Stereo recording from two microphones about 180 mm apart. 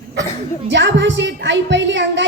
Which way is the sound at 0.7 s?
80° right.